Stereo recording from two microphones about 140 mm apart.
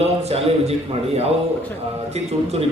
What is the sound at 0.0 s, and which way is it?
A man's voice, 45° right (ahead or behind).